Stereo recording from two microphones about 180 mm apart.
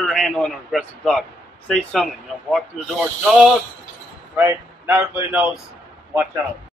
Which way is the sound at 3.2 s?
5° right (ahead or behind).